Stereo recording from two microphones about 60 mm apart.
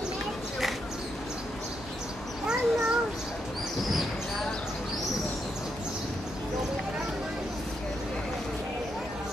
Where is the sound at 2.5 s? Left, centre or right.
Centre.